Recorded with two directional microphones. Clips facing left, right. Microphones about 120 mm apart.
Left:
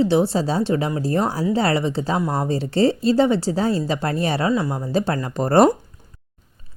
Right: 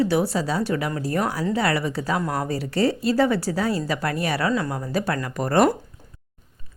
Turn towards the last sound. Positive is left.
turn(degrees=30)  # may be behind; listen again after turning